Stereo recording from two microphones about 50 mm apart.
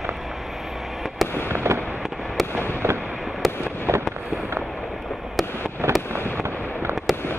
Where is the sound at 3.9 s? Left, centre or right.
Right.